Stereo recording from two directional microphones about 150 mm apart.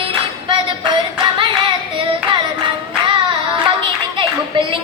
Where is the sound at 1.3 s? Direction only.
35° right (ahead or behind).